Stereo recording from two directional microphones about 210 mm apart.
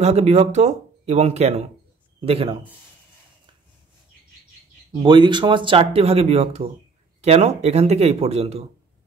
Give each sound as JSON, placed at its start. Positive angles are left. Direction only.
{"t": 0.0, "sound": "speech", "side_deg": -30}
{"t": 5.0, "sound": "speech", "side_deg": -20}